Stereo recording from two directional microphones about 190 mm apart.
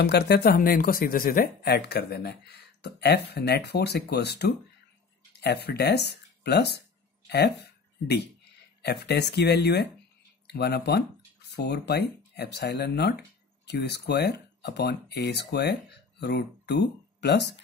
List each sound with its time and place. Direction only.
0.0 s speech: 60° left (ahead or behind)
8.8 s speech: 60° left (ahead or behind)